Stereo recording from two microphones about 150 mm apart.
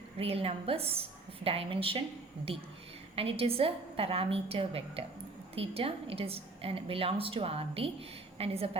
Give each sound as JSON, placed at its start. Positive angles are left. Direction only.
{"t": 0.2, "sound": "a woman's voice", "side_deg": -40}